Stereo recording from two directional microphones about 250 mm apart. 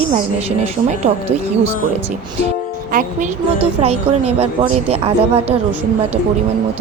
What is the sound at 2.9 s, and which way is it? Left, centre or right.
A woman's voice, right.